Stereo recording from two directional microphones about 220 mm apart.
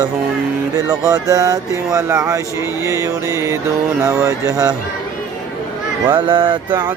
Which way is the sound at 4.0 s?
15° right (ahead or behind).